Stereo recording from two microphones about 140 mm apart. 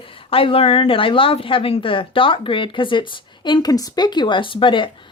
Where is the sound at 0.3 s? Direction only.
40° left (ahead or behind).